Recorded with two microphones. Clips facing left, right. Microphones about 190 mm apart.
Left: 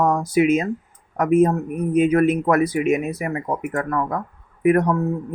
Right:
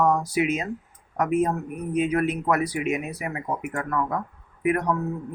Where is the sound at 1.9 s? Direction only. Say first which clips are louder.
Left 7 dB; 50° left (ahead or behind).